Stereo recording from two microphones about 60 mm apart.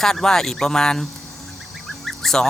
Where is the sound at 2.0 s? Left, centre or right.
Centre.